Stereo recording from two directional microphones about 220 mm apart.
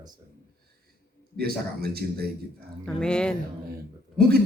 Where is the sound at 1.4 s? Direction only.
45° right (ahead or behind).